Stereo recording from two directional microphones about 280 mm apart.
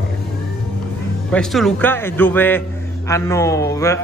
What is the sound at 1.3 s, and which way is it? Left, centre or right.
A man's voice, centre.